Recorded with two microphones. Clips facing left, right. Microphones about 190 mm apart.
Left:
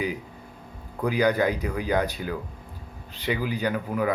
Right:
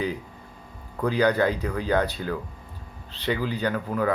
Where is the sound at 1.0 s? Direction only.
15° left (ahead or behind).